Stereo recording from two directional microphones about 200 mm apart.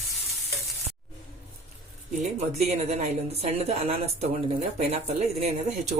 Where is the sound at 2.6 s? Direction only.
35° right (ahead or behind).